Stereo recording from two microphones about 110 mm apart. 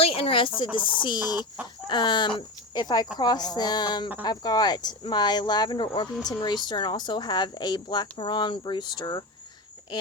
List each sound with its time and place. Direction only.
0.0 s speech: 60° left (ahead or behind); by 9.2 s 40° left (ahead or behind)